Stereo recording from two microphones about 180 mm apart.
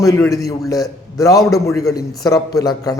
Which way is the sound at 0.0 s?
20° left (ahead or behind).